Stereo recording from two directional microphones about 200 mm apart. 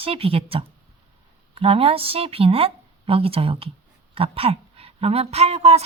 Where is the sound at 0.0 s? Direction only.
30° right (ahead or behind).